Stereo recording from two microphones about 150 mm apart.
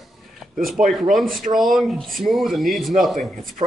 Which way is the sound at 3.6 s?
45° right (ahead or behind).